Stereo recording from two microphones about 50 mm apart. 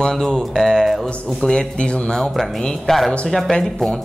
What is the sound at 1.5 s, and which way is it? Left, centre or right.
Speech, centre.